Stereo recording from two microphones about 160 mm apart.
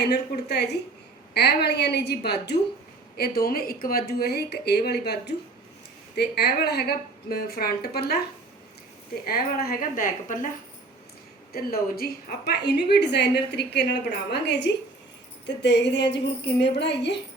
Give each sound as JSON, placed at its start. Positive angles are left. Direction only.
{"t": 0.1, "sound": "a woman's voice", "side_deg": 90}
{"t": 3.2, "sound": "a woman's voice", "side_deg": 75}
{"t": 9.2, "sound": "a woman's voice", "side_deg": 70}
{"t": 11.5, "sound": "a woman's voice", "side_deg": 70}